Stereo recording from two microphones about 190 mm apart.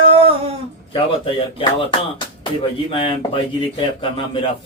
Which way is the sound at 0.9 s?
30° left (ahead or behind).